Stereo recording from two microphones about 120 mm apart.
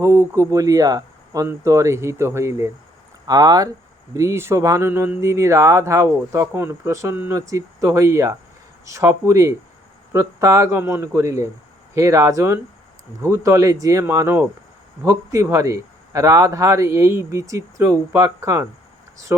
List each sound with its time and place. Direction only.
0.0 s a man's voice: 20° right (ahead or behind)